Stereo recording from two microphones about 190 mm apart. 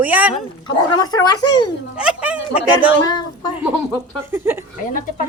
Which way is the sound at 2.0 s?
5° right (ahead or behind).